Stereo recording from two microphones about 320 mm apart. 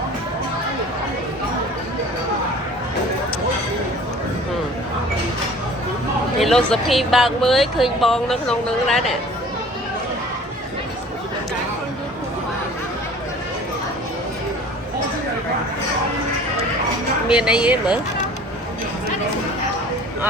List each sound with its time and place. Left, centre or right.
6.4 s speech: centre
17.2 s speech: centre